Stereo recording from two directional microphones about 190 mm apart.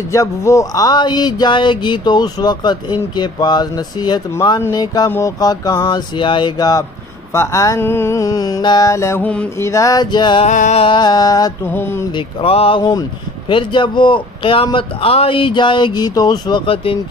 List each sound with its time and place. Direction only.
0.1 s speech: 15° left (ahead or behind)
7.3 s mantra: 15° left (ahead or behind)
10.4 s speech: 40° left (ahead or behind); by 12.1 s 10° left (ahead or behind)
12.1 s speech: 25° left (ahead or behind)